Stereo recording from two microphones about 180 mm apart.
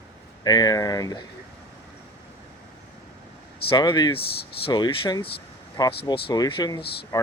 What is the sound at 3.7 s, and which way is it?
Speech, 25° left (ahead or behind).